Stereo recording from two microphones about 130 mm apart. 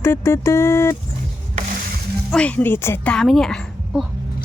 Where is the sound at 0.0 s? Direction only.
20° left (ahead or behind).